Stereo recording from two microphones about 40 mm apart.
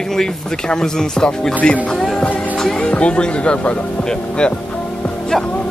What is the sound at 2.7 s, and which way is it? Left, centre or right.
Speech, left.